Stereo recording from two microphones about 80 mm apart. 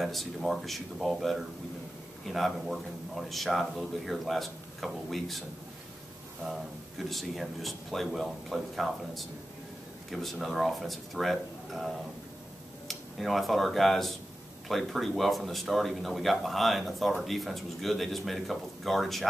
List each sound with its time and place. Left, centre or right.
0.0 s speech: centre
6.4 s speech: centre